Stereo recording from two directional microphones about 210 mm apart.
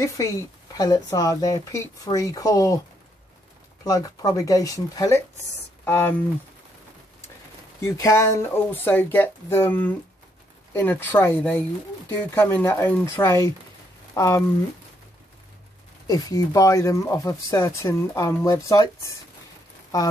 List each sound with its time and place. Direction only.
0.7 s speech: 20° left (ahead or behind)
3.8 s speech: 15° left (ahead or behind)
7.8 s speech: 15° left (ahead or behind)
16.1 s speech: 15° left (ahead or behind)